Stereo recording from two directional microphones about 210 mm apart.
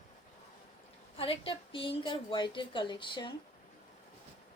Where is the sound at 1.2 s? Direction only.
25° left (ahead or behind).